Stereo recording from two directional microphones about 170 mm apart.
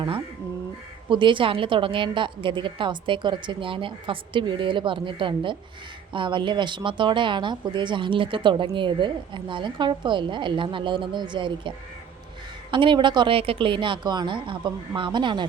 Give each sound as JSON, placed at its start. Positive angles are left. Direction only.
{"t": 1.1, "sound": "speech", "side_deg": -30}
{"t": 12.7, "sound": "speech", "side_deg": -30}